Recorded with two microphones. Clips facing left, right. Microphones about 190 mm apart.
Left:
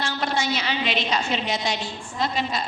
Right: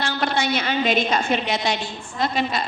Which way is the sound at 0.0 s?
65° right (ahead or behind).